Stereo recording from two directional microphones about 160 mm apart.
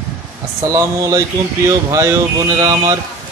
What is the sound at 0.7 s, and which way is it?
Speech, 20° right (ahead or behind).